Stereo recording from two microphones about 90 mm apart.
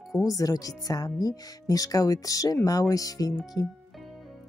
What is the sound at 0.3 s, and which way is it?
Speech, 40° left (ahead or behind).